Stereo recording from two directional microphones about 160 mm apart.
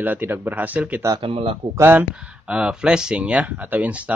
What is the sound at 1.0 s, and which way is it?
Speech, 25° right (ahead or behind).